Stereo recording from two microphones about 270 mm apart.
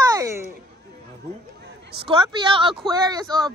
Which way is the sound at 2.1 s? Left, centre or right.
Centre.